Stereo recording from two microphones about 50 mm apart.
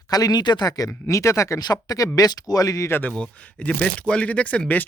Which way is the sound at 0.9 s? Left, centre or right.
Left.